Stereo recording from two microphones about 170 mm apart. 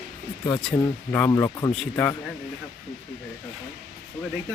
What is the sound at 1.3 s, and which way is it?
Speech, 20° left (ahead or behind).